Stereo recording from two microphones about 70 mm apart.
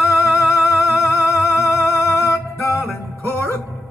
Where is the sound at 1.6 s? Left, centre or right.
Left.